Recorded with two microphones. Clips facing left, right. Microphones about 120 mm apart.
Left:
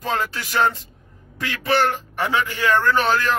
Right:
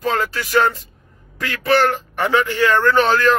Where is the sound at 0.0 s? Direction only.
20° left (ahead or behind).